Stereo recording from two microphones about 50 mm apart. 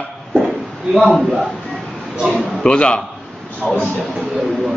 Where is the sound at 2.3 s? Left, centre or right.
Centre.